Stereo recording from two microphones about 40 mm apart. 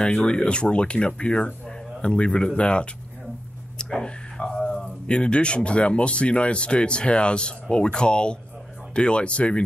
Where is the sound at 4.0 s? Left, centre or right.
Centre.